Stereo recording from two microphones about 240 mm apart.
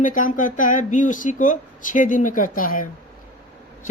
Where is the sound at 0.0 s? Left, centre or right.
Left.